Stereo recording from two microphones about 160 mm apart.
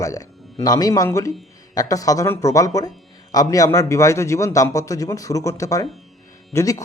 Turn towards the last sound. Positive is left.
turn(degrees=20)  # may be behind; listen again after turning